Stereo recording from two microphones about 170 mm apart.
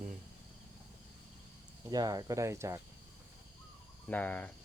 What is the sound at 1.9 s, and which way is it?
Speech, 20° right (ahead or behind).